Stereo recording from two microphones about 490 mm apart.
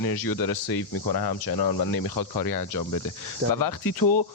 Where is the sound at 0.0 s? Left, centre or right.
Left.